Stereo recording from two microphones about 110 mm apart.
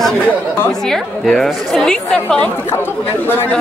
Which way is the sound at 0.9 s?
5° left (ahead or behind).